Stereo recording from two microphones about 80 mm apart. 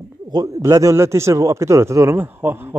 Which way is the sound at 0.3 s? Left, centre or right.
Right.